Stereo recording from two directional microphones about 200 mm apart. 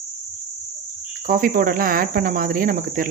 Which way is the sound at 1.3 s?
45° right (ahead or behind).